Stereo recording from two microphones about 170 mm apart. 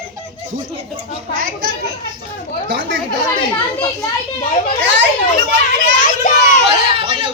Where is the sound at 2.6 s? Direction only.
90° right.